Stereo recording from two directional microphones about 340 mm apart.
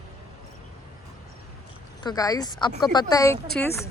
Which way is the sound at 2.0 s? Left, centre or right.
Centre.